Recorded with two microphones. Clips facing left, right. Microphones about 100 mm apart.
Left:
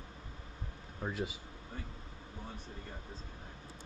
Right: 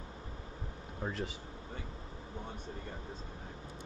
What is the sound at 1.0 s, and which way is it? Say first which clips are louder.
Speech: even; 10° left (ahead or behind).